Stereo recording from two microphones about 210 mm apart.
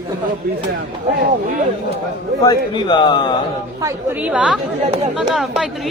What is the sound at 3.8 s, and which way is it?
Speech, 10° right (ahead or behind).